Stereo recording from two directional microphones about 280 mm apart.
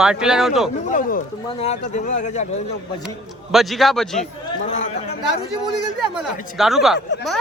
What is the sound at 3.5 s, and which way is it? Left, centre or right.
Speech, centre.